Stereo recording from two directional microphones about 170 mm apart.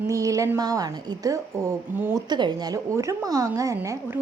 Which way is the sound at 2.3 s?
25° right (ahead or behind).